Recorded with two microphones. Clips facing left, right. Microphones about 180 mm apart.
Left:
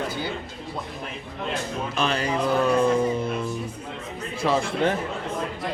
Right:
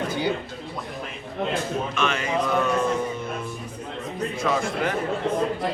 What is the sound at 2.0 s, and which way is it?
Speech, 35° left (ahead or behind).